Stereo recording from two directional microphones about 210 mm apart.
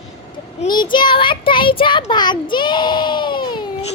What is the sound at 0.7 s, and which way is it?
A child's voice, 20° left (ahead or behind).